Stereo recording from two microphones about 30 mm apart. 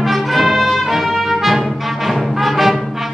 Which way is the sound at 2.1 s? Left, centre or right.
Centre.